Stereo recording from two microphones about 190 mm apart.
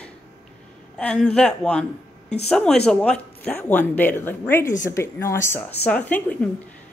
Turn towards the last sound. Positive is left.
turn(degrees=10)  # may be behind; listen again after turning